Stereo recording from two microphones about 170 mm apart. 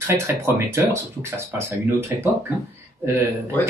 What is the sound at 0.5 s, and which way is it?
Speech, 15° right (ahead or behind).